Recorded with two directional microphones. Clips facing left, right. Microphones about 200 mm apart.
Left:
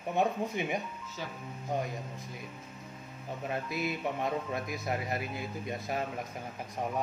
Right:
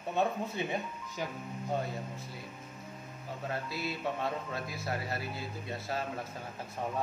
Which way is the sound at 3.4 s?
20° left (ahead or behind).